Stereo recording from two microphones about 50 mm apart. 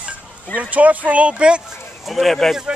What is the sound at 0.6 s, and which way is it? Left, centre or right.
Speech, right.